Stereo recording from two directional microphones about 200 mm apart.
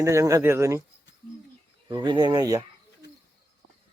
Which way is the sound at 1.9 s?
20° right (ahead or behind).